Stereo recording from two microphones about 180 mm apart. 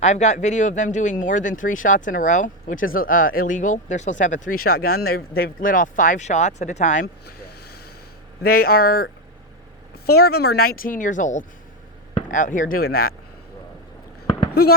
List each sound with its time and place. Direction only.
0.0 s speech: 40° left (ahead or behind)
8.4 s speech: 55° left (ahead or behind)
10.1 s speech: 60° left (ahead or behind)
14.6 s speech: 60° left (ahead or behind)